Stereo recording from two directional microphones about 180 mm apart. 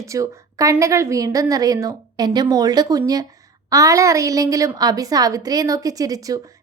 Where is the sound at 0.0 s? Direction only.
20° right (ahead or behind).